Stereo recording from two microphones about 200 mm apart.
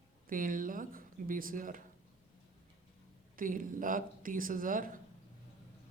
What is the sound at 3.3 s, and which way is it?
Speech, 40° right (ahead or behind).